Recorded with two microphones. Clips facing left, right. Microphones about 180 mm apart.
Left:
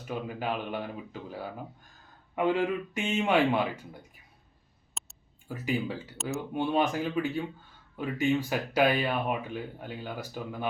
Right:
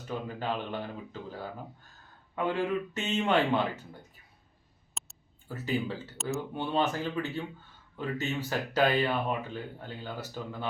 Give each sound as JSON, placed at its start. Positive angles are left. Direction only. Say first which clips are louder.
{"t": 0.0, "sound": "speech", "louder": "left 1 dB", "side_deg": 10}
{"t": 5.0, "sound": "a sound", "louder": "even", "side_deg": 0}
{"t": 5.5, "sound": "speech", "louder": "left 1 dB", "side_deg": 10}